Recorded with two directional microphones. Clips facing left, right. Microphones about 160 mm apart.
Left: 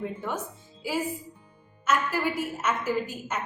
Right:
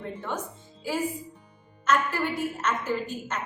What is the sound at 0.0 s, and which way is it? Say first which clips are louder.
A woman's voice: left 1 dB; 10° left (ahead or behind).